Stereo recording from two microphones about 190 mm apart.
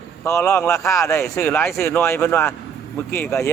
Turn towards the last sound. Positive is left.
turn(degrees=15)  # may be behind; listen again after turning